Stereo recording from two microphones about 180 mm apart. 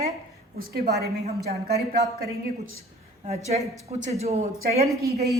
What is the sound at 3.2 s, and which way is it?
Speech, 35° right (ahead or behind).